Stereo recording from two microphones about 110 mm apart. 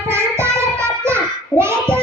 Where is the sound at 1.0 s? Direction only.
25° right (ahead or behind).